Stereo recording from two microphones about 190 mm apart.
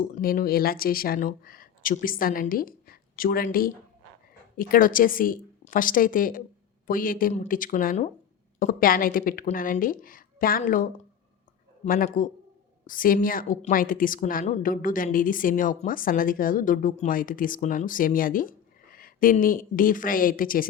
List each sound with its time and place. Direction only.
0.0 s a woman's voice: 50° left (ahead or behind)
11.9 s a woman's voice: 45° left (ahead or behind)